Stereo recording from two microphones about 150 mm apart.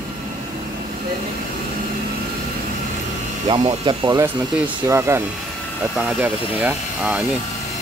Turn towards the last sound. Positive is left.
turn(degrees=-5)  # may be behind; listen again after turning